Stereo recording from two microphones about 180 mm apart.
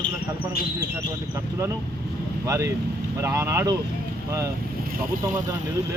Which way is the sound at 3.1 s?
15° right (ahead or behind).